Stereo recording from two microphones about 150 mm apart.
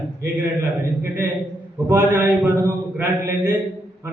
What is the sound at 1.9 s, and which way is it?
A man's voice, 10° right (ahead or behind).